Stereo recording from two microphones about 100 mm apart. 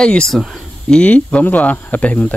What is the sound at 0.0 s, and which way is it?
Speech, 10° left (ahead or behind).